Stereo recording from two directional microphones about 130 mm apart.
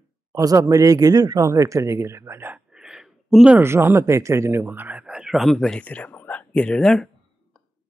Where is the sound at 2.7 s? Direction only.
5° right (ahead or behind).